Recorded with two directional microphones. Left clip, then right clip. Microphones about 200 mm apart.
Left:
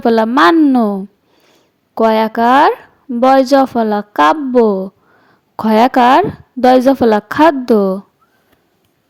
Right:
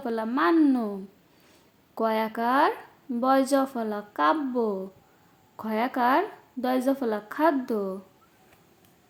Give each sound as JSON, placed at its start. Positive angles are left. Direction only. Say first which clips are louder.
{"t": 0.0, "sound": "speech", "louder": "left 16 dB", "side_deg": 45}
{"t": 0.5, "sound": "speech", "louder": "left 12 dB", "side_deg": 40}
{"t": 1.4, "sound": "a sound", "louder": "left 7 dB", "side_deg": 30}
{"t": 2.0, "sound": "speech", "louder": "left 15 dB", "side_deg": 45}